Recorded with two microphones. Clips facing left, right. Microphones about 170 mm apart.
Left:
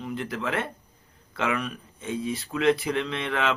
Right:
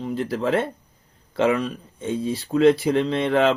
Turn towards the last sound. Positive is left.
turn(degrees=-35)  # may be behind; listen again after turning